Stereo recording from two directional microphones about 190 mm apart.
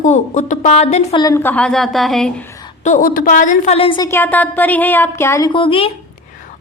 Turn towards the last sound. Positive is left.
turn(degrees=30)  # may be behind; listen again after turning